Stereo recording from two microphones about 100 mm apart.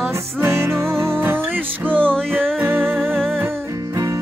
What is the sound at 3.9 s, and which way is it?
Music, 35° right (ahead or behind).